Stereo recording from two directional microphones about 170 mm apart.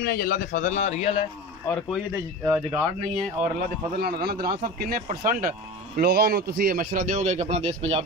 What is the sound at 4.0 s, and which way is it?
A man's voice, 65° right (ahead or behind).